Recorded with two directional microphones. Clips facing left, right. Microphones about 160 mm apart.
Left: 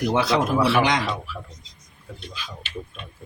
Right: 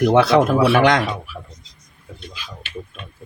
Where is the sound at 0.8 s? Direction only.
55° right (ahead or behind).